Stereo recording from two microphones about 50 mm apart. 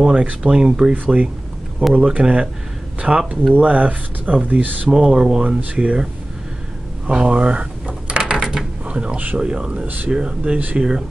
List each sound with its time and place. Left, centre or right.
0.0 s speech: centre
0.9 s speech: right
4.8 s speech: centre
7.1 s a sound: right
8.4 s mechanisms: centre
8.8 s speech: right